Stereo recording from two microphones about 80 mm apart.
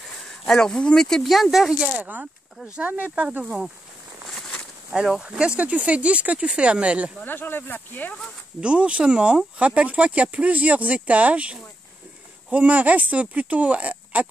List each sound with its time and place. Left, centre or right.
0.5 s speech: centre
2.0 s speech: centre
3.4 s speech: centre
4.4 s a sound: centre
4.9 s speech: centre
7.2 s speech: left
8.5 s speech: centre